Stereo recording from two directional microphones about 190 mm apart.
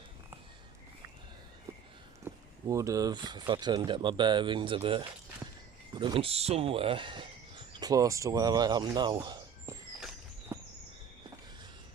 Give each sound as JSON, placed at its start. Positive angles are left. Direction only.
{"t": 2.2, "sound": "speech", "side_deg": -15}